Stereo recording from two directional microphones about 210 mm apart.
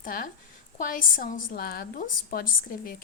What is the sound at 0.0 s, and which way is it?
A woman's voice, 40° left (ahead or behind).